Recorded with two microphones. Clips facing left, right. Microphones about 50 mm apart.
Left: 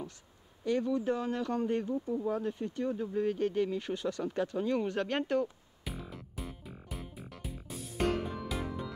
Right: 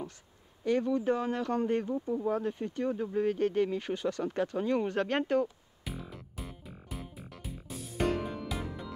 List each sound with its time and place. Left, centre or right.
0.7 s speech: centre
1.0 s speech: centre
1.5 s speech: centre
1.9 s speech: right
5.9 s music: centre